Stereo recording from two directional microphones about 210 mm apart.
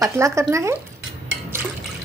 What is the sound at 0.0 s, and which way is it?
Speech, 15° right (ahead or behind).